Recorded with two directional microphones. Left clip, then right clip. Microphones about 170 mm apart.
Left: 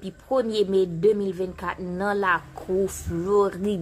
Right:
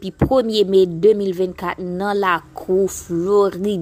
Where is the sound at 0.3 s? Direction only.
35° right (ahead or behind).